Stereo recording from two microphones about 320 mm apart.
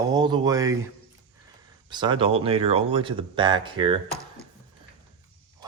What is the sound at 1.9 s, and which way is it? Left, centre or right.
Speech, centre.